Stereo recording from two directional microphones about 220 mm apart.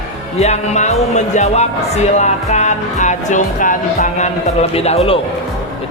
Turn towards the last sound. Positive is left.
turn(degrees=25)  # may be behind; listen again after turning